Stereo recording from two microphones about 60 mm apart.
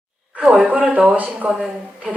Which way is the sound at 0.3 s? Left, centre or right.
Centre.